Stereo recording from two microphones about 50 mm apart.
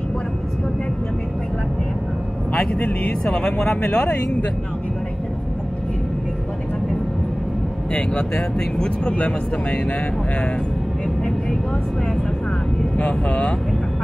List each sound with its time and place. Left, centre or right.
2.8 s speech: left
3.3 s speech: left
7.9 s speech: left
12.9 s speech: left